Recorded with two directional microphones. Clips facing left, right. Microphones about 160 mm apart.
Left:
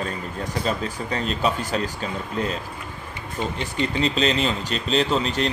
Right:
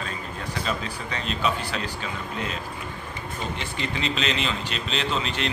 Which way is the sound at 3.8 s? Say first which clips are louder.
Left 6 dB; 40° left (ahead or behind).